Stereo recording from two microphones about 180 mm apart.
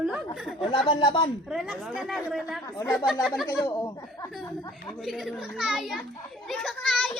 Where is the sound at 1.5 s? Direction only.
5° right (ahead or behind).